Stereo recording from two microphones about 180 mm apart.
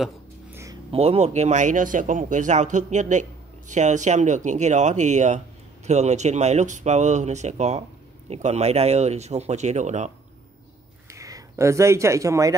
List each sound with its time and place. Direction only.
0.5 s a sound: 15° right (ahead or behind)
0.9 s speech: 35° right (ahead or behind)
11.1 s speech: 20° right (ahead or behind)